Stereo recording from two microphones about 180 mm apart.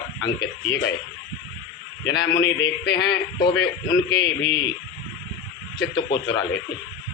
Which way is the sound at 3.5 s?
80° left.